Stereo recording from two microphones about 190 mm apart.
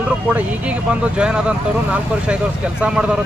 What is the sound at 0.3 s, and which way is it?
Speech, 5° right (ahead or behind).